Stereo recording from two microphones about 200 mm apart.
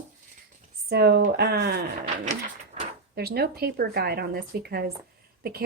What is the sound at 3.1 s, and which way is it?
Speech, 50° right (ahead or behind).